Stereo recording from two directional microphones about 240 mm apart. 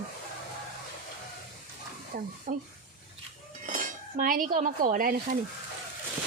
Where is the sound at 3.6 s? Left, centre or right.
Right.